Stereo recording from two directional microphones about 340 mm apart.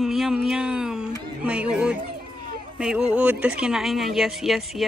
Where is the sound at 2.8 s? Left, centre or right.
Centre.